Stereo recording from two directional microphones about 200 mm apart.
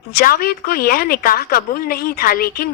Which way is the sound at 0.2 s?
45° left (ahead or behind).